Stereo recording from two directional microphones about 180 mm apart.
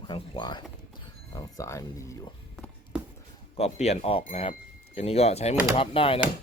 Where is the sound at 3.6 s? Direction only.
35° left (ahead or behind).